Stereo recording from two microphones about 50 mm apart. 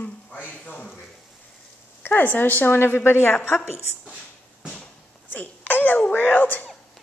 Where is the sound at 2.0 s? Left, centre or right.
Left.